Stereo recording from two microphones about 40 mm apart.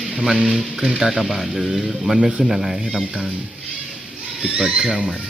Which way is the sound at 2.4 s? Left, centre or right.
Centre.